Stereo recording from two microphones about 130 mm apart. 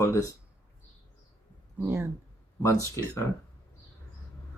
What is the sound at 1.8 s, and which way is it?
Speech, 15° right (ahead or behind).